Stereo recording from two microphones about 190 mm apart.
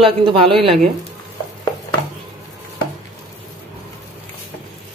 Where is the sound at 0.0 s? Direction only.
25° right (ahead or behind).